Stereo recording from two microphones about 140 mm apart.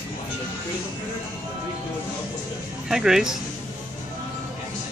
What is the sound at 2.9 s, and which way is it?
Speech, 5° right (ahead or behind).